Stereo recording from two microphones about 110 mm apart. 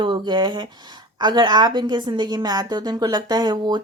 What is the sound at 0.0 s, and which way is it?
A woman's voice, 45° right (ahead or behind).